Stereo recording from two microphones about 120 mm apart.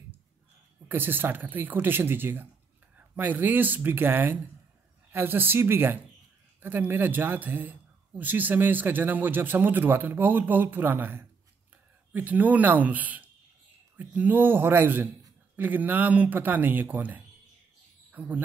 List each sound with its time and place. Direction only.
0.8 s speech: 15° right (ahead or behind)